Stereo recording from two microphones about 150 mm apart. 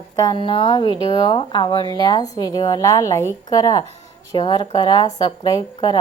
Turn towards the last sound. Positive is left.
turn(degrees=30)  # may be behind; listen again after turning